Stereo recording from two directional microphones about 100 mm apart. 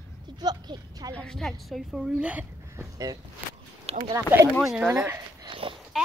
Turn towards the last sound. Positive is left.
turn(degrees=-5)  # may be behind; listen again after turning